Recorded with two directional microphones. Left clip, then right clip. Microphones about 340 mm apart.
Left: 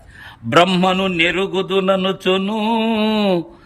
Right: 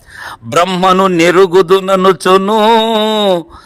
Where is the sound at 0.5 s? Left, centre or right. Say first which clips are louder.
Right 5 dB; centre.